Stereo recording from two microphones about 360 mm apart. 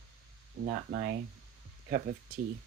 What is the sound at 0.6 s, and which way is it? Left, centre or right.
Speech, right.